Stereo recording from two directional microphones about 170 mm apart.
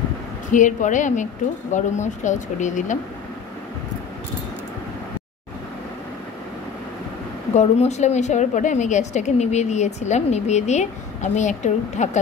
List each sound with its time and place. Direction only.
0.5 s a woman's voice: 50° left (ahead or behind)
7.5 s a woman's voice: 40° left (ahead or behind)